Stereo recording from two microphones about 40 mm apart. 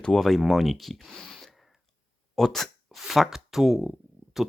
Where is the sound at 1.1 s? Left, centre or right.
Centre.